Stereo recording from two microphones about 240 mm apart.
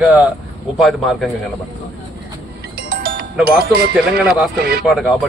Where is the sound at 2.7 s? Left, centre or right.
Right.